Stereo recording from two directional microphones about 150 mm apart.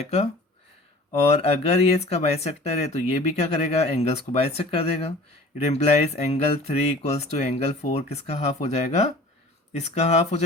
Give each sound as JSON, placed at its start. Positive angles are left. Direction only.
{"t": 0.0, "sound": "speech", "side_deg": 45}
{"t": 1.3, "sound": "speech", "side_deg": 40}